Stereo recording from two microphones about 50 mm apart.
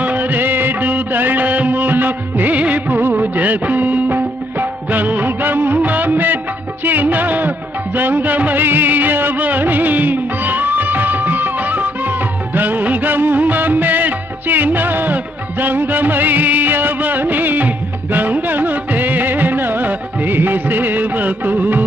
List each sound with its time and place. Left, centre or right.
0.0 s music of bollywood: right
6.8 s music: right
7.9 s music of bollywood: right
18.1 s music: right